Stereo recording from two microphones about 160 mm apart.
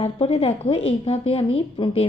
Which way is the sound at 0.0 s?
40° left (ahead or behind).